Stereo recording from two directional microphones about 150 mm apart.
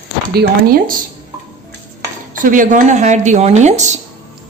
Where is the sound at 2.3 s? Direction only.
60° right (ahead or behind).